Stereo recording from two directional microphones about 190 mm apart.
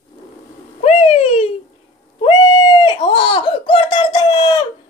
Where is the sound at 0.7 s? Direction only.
30° left (ahead or behind).